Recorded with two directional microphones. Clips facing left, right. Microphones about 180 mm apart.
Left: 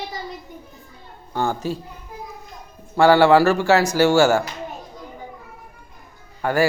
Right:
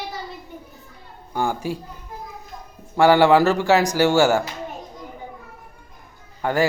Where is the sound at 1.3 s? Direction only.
10° right (ahead or behind).